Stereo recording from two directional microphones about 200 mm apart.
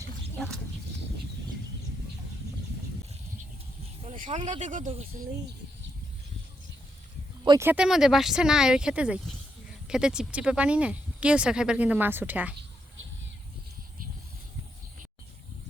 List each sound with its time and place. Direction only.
0.3 s goat: centre (ahead or behind)
4.1 s speech: 40° right (ahead or behind)
7.4 s speech: 20° right (ahead or behind)
7.7 s speech: 5° right (ahead or behind)